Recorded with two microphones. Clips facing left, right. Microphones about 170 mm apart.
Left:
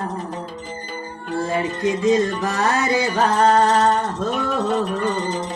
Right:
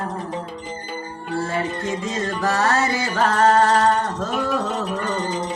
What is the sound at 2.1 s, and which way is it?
Music, 15° left (ahead or behind).